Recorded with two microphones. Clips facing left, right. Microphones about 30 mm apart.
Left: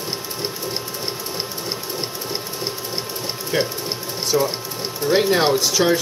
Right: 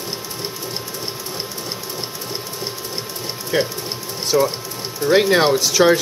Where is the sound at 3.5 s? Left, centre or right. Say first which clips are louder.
Right 2 dB; centre; by 5.9 s right.